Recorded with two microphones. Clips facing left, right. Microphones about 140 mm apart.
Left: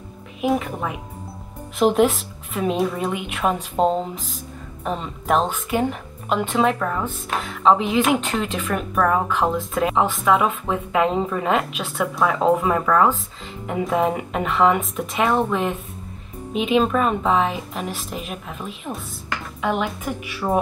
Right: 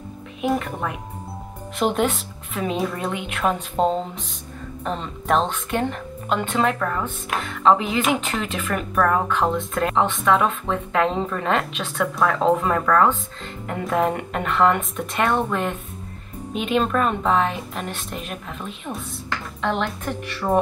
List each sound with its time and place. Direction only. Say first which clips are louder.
0.4 s speech: left 2 dB; centre (ahead or behind)